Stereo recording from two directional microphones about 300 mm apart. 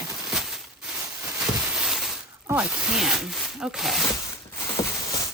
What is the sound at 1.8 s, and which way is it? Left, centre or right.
Glass, centre.